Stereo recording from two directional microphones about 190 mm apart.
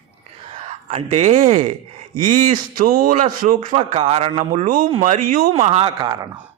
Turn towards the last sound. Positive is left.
turn(degrees=-20)  # may be behind; listen again after turning